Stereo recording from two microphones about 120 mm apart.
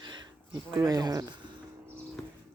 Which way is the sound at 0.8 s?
30° right (ahead or behind).